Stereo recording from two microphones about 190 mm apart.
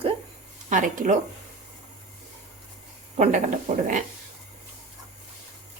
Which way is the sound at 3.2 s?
40° right (ahead or behind).